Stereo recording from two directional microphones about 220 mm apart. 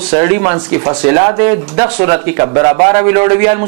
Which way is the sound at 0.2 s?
25° right (ahead or behind).